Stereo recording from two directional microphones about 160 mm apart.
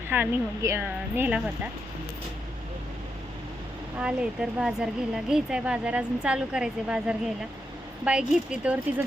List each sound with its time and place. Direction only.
0.1 s speech: 15° right (ahead or behind)
4.0 s speech: 5° right (ahead or behind)